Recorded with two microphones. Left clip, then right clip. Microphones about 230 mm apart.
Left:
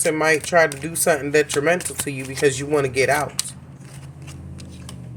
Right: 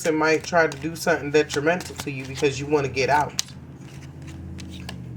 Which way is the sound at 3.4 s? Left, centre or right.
Right.